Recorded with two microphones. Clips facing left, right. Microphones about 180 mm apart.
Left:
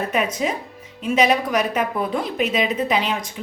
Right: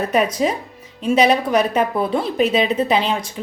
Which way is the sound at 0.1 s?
35° right (ahead or behind).